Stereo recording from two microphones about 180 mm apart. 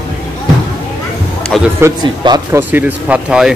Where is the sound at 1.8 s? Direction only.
25° right (ahead or behind).